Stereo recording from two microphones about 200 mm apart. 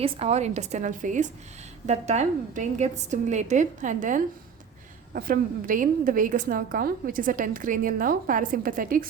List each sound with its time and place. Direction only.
0.0 s a woman's voice: 30° right (ahead or behind)